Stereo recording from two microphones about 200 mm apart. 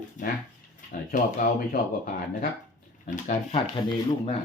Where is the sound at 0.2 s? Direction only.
40° left (ahead or behind).